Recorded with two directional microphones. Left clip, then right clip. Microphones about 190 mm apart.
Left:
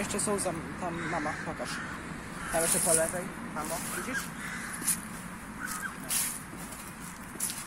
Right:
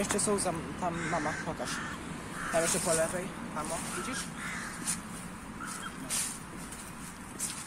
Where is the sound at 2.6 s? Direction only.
40° left (ahead or behind).